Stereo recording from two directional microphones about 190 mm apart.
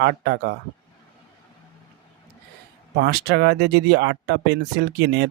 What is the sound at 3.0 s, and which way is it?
Speech, 60° right (ahead or behind).